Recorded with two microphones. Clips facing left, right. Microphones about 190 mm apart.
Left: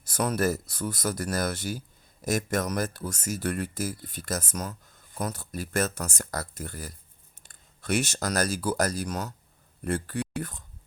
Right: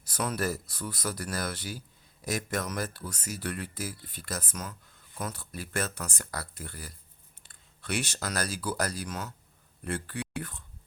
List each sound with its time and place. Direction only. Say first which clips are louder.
0.0 s speech: left 5 dB; 45° left (ahead or behind)